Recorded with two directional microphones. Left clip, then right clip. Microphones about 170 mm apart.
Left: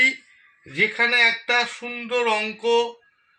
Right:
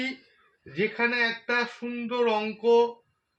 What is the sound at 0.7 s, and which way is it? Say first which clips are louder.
Speech: left 6 dB; 25° left (ahead or behind).